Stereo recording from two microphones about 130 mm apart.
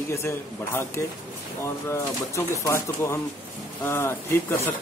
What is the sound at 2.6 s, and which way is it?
Speech, 20° left (ahead or behind).